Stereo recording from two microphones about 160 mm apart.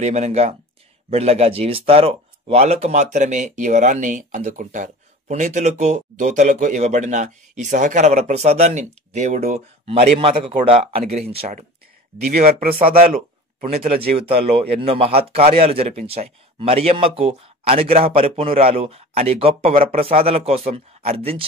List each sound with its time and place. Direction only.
0.0 s speech: 45° right (ahead or behind)
12.3 s speech: 60° right (ahead or behind)
13.0 s a sound: 60° right (ahead or behind)
14.1 s speech: 35° right (ahead or behind)